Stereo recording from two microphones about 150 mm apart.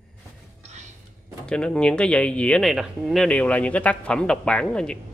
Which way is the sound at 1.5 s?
5° left (ahead or behind).